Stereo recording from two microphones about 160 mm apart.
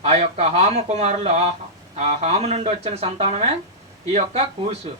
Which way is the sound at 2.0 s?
40° right (ahead or behind).